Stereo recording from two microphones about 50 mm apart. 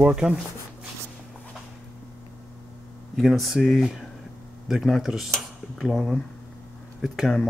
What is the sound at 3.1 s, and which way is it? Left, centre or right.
Speech, centre.